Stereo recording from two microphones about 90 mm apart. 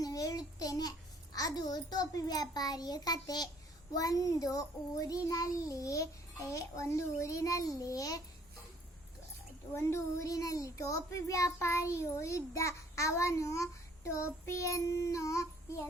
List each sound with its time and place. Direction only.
0.0 s a child's voice: 40° left (ahead or behind)
9.7 s a child's voice: 30° left (ahead or behind)